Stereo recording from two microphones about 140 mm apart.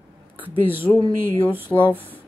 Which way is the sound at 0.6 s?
15° right (ahead or behind).